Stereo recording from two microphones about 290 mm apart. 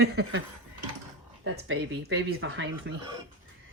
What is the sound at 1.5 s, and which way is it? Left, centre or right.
Speech, right.